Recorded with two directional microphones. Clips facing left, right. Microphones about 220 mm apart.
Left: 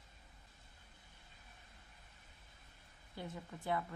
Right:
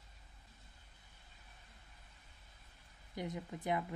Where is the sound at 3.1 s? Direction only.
20° right (ahead or behind).